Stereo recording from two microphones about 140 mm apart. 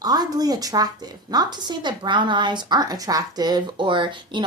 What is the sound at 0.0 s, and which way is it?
A woman's voice, 30° right (ahead or behind).